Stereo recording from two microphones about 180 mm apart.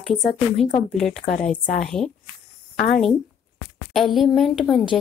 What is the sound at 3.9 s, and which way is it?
Speech, centre (ahead or behind).